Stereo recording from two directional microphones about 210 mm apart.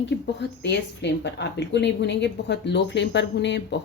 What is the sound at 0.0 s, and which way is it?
Speech, 55° left (ahead or behind).